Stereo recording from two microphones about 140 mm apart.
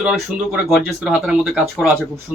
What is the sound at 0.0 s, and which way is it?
Speech, 5° right (ahead or behind).